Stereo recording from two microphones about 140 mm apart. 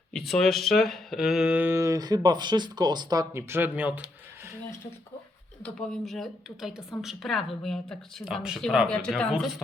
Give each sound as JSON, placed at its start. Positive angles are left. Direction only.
{"t": 0.1, "sound": "speech", "side_deg": 5}
{"t": 3.5, "sound": "speech", "side_deg": -15}
{"t": 5.6, "sound": "speech", "side_deg": 0}